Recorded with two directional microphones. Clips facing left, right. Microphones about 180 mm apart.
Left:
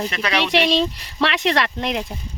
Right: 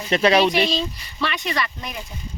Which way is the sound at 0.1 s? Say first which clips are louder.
Right 8 dB; 30° right (ahead or behind).